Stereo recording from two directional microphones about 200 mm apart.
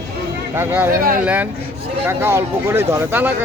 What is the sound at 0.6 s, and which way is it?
Speech, 10° right (ahead or behind).